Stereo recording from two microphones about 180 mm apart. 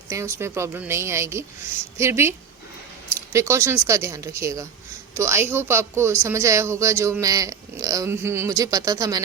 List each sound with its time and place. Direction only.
0.1 s speech: 15° right (ahead or behind)